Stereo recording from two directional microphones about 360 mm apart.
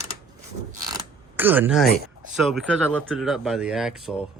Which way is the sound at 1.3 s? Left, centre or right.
Centre.